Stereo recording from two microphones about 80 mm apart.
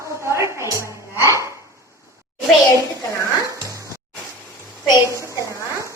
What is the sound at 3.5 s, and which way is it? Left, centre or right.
Music, right.